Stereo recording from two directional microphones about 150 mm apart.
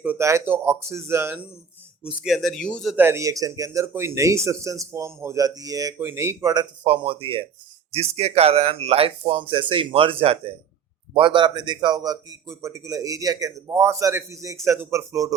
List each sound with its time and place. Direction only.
0.0 s speech: 15° right (ahead or behind)
2.2 s speech: centre (ahead or behind)
2.9 s speech: 15° right (ahead or behind)